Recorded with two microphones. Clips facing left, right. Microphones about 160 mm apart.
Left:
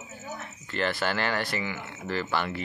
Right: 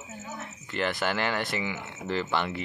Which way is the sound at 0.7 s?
15° right (ahead or behind).